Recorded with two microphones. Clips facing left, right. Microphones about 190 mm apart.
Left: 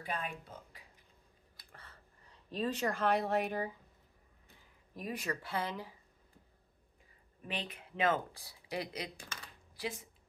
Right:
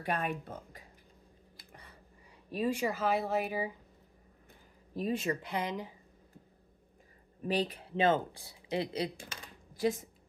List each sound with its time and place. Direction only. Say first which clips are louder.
0.0 s speech: right 6 dB; 65° right (ahead or behind)
1.6 s a sound: right 2 dB; 15° right (ahead or behind)
2.5 s speech: right 3 dB; 10° right (ahead or behind)
4.9 s speech: right 7 dB; 25° right (ahead or behind)
7.4 s speech: right 10 dB; 35° right (ahead or behind)
9.8 s speech: right 10 dB; 45° right (ahead or behind)